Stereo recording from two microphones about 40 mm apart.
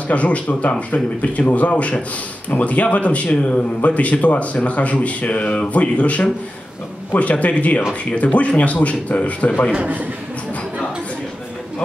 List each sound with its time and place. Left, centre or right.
0.1 s speech: left